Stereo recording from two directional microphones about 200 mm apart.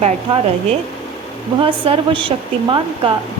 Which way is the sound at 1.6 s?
25° right (ahead or behind).